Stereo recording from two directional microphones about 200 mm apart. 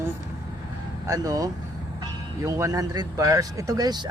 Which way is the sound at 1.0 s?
15° right (ahead or behind).